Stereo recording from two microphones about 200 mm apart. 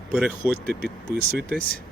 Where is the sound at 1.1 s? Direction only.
50° right (ahead or behind).